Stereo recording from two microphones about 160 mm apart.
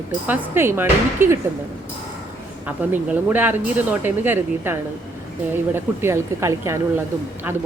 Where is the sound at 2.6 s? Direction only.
10° right (ahead or behind).